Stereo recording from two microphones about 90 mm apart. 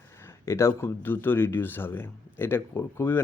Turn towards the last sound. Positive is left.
turn(degrees=25)  # may be behind; listen again after turning